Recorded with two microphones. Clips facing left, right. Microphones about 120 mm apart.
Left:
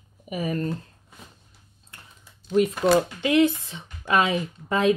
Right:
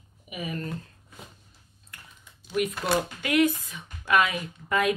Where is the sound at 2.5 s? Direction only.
30° left (ahead or behind).